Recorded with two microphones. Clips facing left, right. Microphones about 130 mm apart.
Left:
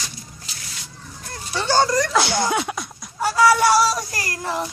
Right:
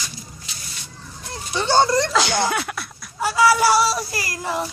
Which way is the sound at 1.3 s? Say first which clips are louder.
Right 2 dB; 20° right (ahead or behind).